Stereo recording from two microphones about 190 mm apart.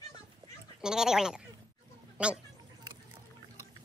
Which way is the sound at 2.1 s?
5° right (ahead or behind).